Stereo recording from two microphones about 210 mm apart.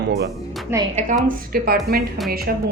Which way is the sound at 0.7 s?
10° right (ahead or behind).